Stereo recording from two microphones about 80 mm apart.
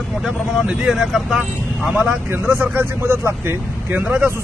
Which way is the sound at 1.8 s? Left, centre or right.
Right.